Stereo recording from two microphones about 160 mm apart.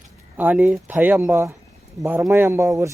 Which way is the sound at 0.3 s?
10° right (ahead or behind).